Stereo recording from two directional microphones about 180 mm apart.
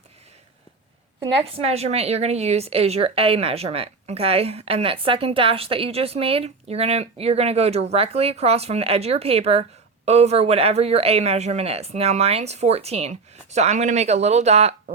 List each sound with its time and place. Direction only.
1.5 s a woman's voice: 35° right (ahead or behind)